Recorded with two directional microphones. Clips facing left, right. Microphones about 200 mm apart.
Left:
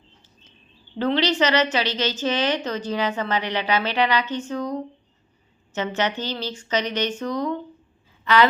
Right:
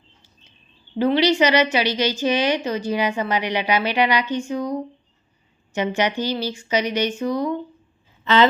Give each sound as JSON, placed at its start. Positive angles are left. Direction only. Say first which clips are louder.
{"t": 0.9, "sound": "a woman's voice", "louder": "right 4 dB", "side_deg": -10}
{"t": 8.2, "sound": "speech", "louder": "right 1 dB", "side_deg": -25}